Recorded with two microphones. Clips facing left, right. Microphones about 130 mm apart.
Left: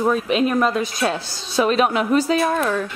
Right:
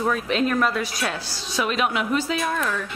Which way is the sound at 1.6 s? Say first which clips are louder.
Left 6 dB; 40° left (ahead or behind).